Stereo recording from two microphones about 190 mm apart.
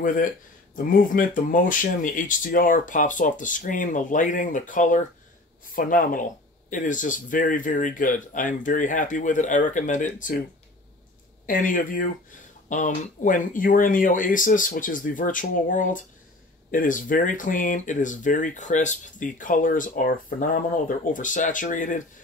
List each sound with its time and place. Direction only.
0.7 s speech: 45° left (ahead or behind)
11.4 s speech: 45° left (ahead or behind)